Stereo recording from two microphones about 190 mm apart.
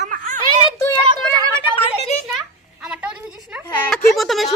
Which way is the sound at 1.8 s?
35° left (ahead or behind).